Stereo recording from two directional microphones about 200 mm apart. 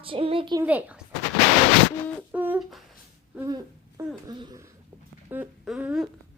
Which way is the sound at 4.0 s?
15° right (ahead or behind).